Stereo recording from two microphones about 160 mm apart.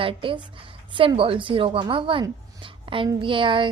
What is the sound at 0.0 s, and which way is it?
A woman's voice, 35° right (ahead or behind).